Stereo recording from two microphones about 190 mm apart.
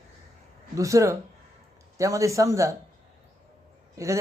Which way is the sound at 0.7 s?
15° right (ahead or behind).